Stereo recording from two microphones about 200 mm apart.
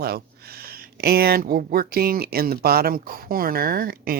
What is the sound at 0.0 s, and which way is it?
Speech, 50° right (ahead or behind).